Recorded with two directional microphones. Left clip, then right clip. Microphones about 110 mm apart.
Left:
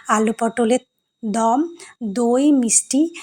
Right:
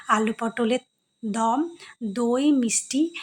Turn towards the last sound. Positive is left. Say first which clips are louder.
# left 6 dB
turn(degrees=35)  # may be behind; listen again after turning